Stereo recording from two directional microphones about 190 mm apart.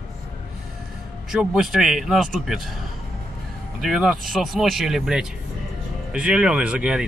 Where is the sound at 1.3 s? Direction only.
5° right (ahead or behind).